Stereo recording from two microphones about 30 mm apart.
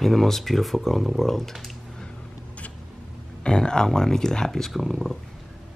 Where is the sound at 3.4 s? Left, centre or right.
Left; by 5.1 s centre.